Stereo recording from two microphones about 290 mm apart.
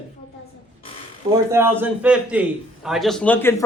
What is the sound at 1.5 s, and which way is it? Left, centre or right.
A man's voice, centre.